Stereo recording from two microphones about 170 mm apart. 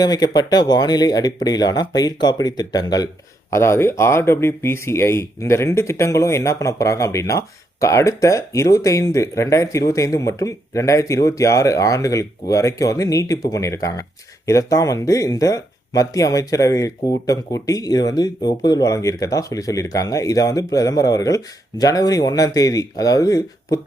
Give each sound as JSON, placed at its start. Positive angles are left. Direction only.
{"t": 0.0, "sound": "speech", "side_deg": 25}